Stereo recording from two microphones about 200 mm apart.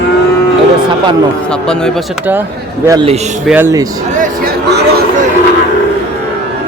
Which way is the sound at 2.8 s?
20° right (ahead or behind).